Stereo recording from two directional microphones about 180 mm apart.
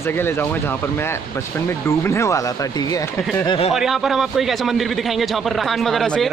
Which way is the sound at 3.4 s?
30° left (ahead or behind).